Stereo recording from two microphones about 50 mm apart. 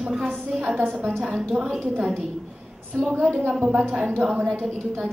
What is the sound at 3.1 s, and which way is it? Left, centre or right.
A woman's voice, right.